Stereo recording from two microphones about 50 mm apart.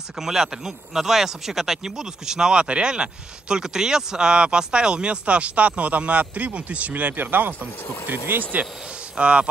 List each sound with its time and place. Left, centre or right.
0.2 s speech: centre; by 8.6 s right
9.1 s speech: right